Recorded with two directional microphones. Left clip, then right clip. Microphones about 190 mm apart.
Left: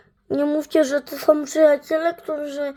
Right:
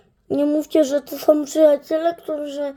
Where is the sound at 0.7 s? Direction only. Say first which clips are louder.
Right 1 dB; 5° right (ahead or behind).